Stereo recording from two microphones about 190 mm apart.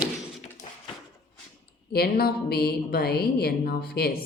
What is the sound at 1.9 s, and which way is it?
A woman's voice, 55° left (ahead or behind).